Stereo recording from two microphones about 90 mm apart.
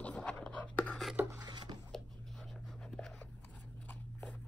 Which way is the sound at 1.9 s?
5° left (ahead or behind).